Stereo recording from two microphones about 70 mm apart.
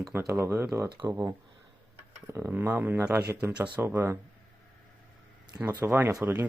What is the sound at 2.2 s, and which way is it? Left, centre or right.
Speech, right.